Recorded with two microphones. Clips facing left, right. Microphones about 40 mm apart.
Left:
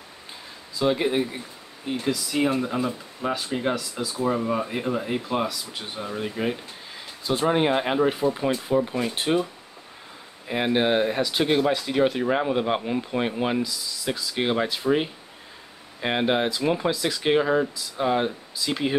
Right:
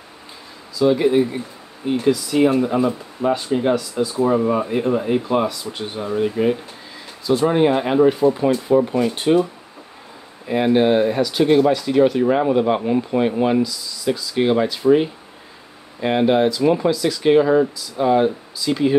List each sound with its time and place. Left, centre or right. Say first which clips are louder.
0.8 s speech: right 7 dB; centre
1.9 s speech: right 8 dB; centre
4.2 s speech: right 6 dB; centre
7.4 s speech: right 4 dB; centre
8.2 s speech: right 7 dB; centre
9.1 s speech: right 6 dB; centre
10.5 s speech: right 6 dB; centre
12.8 s speech: right 7 dB; centre
13.2 s speech: right 7 dB; centre